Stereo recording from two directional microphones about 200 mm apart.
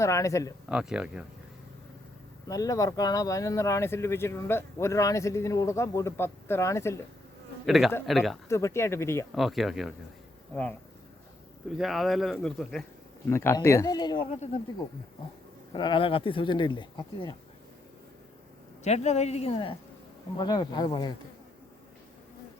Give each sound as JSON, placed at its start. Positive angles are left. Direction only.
{"t": 0.0, "sound": "speech", "side_deg": 15}
{"t": 0.7, "sound": "speech", "side_deg": -5}
{"t": 2.5, "sound": "speech", "side_deg": 15}
{"t": 7.7, "sound": "speech", "side_deg": 0}
{"t": 8.4, "sound": "speech", "side_deg": 15}
{"t": 9.3, "sound": "speech", "side_deg": 0}
{"t": 14.3, "sound": "a woman's voice", "side_deg": 35}
{"t": 15.7, "sound": "speech", "side_deg": 25}
{"t": 18.9, "sound": "a woman's voice", "side_deg": 35}